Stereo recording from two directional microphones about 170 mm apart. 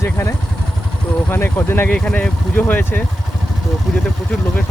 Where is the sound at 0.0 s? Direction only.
15° left (ahead or behind).